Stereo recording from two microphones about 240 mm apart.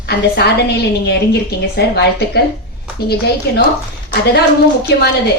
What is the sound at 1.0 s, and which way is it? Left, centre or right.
A woman's voice, left.